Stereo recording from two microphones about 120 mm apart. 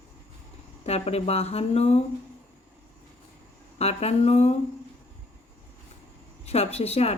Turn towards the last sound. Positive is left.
turn(degrees=60)  # may be behind; listen again after turning